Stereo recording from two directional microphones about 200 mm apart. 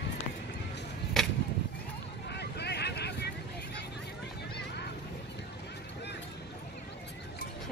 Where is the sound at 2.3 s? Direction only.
55° left (ahead or behind).